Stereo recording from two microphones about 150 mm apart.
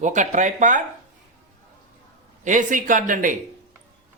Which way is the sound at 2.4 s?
55° right (ahead or behind).